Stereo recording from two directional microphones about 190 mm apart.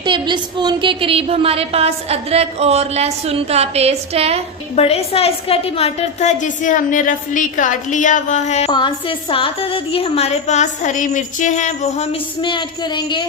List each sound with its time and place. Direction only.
0.0 s a woman's voice: 25° right (ahead or behind)
4.7 s a woman's voice: 30° left (ahead or behind)
8.7 s a woman's voice: 25° left (ahead or behind)
12.4 s speech: 25° left (ahead or behind)